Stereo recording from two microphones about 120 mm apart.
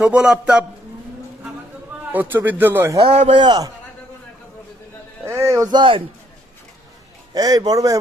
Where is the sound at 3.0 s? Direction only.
50° right (ahead or behind).